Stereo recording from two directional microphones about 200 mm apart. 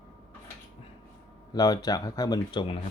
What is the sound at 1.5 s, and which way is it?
Speech, 20° left (ahead or behind).